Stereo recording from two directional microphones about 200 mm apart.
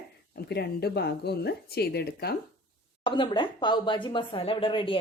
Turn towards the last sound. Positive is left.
turn(degrees=25)  # may be behind; listen again after turning